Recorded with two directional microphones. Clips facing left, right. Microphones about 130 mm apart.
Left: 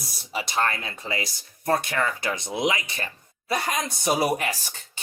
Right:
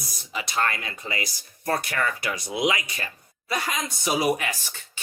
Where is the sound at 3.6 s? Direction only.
40° left (ahead or behind).